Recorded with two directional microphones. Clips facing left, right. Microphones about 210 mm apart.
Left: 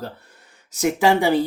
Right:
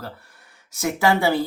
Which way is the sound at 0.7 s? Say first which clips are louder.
Left 3 dB; 15° left (ahead or behind).